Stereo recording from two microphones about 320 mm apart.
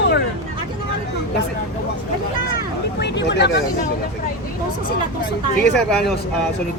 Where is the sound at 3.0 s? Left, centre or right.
Left.